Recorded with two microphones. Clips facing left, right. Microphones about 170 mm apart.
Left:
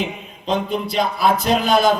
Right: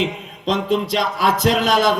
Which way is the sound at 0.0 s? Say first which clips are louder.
Right 4 dB; 90° right.